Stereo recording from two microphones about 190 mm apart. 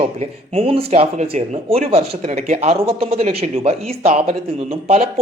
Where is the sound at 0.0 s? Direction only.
30° right (ahead or behind).